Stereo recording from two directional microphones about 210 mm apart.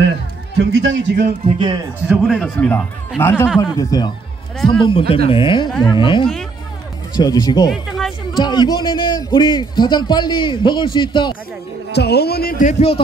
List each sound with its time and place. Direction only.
0.7 s a man's voice: 60° right (ahead or behind)
1.4 s a man's voice: 20° right (ahead or behind)
2.0 s a man's voice: centre (ahead or behind); by 11.3 s 20° left (ahead or behind)
11.9 s speech: 50° left (ahead or behind); by 13.0 s 30° left (ahead or behind)